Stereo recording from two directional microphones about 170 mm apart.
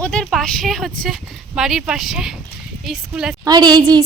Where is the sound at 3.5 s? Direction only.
25° right (ahead or behind).